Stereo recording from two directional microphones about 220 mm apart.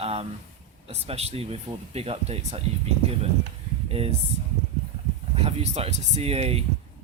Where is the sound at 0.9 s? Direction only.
30° right (ahead or behind).